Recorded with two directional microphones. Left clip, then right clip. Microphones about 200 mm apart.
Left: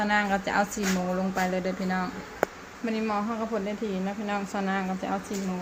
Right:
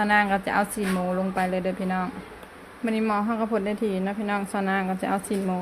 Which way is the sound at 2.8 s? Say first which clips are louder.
Right 4 dB; 30° right (ahead or behind).